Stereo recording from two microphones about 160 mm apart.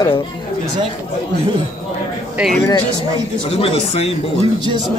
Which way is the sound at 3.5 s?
40° left (ahead or behind).